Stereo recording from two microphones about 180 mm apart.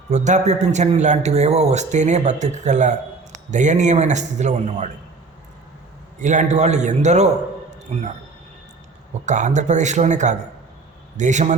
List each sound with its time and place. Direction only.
0.1 s a man's voice: 40° right (ahead or behind)
6.1 s a man's voice: 40° right (ahead or behind)
9.2 s a man's voice: 40° right (ahead or behind)